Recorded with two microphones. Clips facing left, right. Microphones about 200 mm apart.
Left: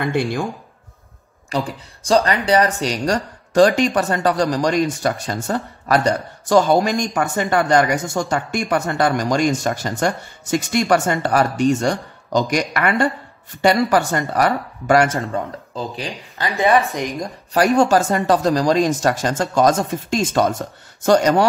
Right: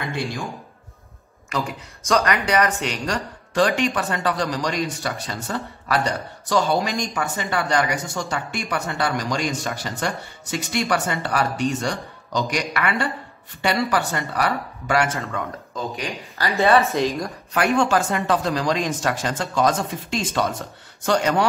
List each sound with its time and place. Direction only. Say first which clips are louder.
1.5 s speech: left 4 dB; 30° left (ahead or behind)
15.3 s speech: left 4 dB; 35° left (ahead or behind)
16.3 s speech: left 1 dB; 15° left (ahead or behind)
17.6 s speech: left 5 dB; 40° left (ahead or behind)